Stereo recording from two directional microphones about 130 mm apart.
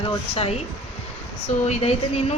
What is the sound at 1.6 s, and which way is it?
Speech, 55° left (ahead or behind).